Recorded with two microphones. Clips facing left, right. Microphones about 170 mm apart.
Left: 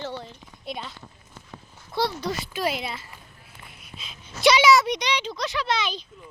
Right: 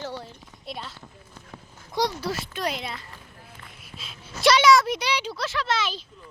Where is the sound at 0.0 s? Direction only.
10° right (ahead or behind).